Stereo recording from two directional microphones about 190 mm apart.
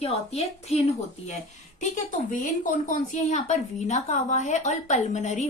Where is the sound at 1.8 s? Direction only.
45° left (ahead or behind).